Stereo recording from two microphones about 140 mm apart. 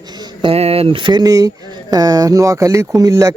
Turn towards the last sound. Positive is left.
turn(degrees=-25)  # may be behind; listen again after turning